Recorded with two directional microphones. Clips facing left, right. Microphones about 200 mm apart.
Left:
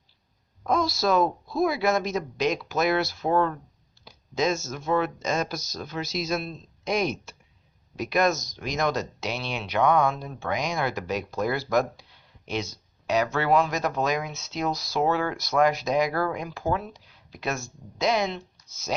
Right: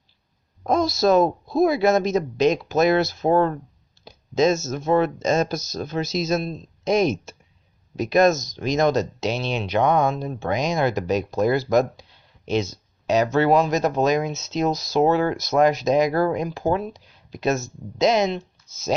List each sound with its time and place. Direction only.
0.7 s speech: 25° right (ahead or behind)
3.3 s speech: 35° right (ahead or behind)
4.0 s speech: 25° right (ahead or behind)